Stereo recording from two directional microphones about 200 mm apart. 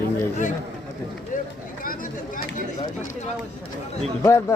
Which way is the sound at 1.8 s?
45° left (ahead or behind).